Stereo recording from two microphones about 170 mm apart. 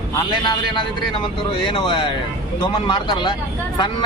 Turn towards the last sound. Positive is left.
turn(degrees=25)  # may be behind; listen again after turning